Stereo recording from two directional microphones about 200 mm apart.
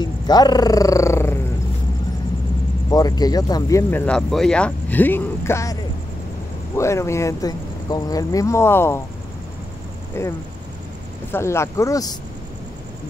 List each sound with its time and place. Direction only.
0.0 s purr: 20° left (ahead or behind)
2.9 s speech: 20° left (ahead or behind)
10.1 s speech: 10° left (ahead or behind)
11.3 s speech: 15° left (ahead or behind)